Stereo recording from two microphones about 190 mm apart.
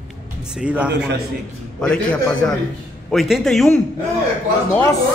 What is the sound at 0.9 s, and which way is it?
Speech, 65° right (ahead or behind).